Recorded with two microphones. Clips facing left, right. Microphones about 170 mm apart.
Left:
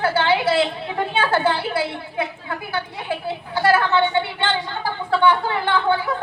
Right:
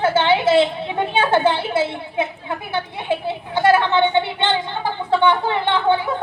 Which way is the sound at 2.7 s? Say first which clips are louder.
Right 4 dB; 25° right (ahead or behind).